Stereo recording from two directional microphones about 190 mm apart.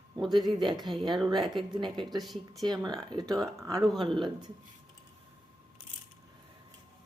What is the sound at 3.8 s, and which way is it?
Speech, 25° right (ahead or behind).